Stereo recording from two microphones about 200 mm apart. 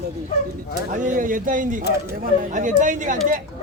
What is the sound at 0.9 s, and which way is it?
A man's voice, 40° right (ahead or behind).